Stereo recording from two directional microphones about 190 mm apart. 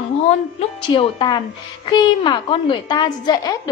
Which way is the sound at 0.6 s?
25° left (ahead or behind).